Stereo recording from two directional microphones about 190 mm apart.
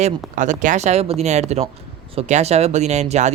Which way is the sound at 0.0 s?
40° right (ahead or behind).